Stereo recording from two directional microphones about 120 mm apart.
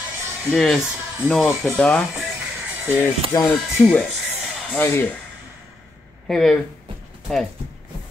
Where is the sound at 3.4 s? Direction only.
5° left (ahead or behind).